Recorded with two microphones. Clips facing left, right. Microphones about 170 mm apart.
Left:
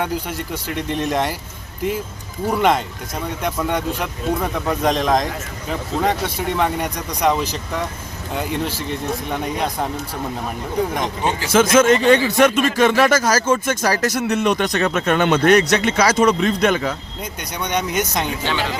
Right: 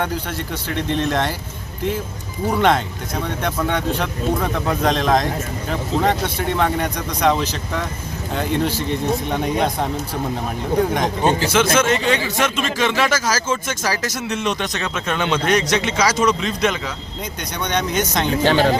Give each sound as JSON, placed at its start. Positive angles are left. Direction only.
{"t": 0.0, "sound": "speech", "side_deg": 10}
{"t": 2.5, "sound": "speech", "side_deg": 10}
{"t": 11.5, "sound": "speech", "side_deg": 45}
{"t": 17.6, "sound": "speech", "side_deg": 10}
{"t": 18.4, "sound": "speech", "side_deg": -40}